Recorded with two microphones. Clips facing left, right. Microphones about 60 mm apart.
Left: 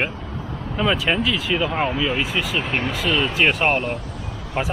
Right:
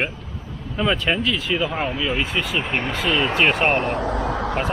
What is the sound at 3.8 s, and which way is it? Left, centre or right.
Vehicle, right.